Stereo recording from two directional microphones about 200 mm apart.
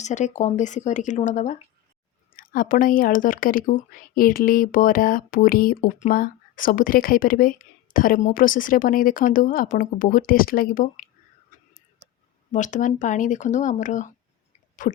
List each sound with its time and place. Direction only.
0.0 s speech: 35° left (ahead or behind)
12.5 s speech: 40° left (ahead or behind)